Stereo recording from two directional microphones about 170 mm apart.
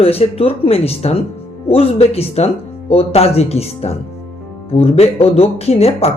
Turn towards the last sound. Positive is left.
turn(degrees=35)  # may be behind; listen again after turning